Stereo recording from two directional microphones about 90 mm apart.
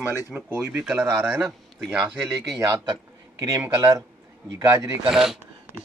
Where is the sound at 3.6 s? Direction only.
25° right (ahead or behind).